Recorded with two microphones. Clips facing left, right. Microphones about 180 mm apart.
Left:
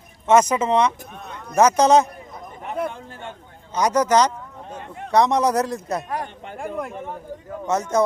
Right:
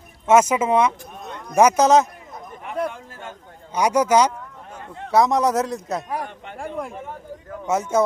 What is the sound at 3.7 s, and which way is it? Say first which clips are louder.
A man's voice: right 1 dB; 10° right (ahead or behind).